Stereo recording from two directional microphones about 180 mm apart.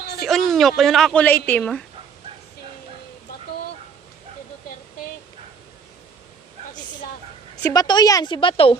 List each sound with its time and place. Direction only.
0.2 s speech: centre (ahead or behind)
7.5 s a woman's voice: 20° left (ahead or behind)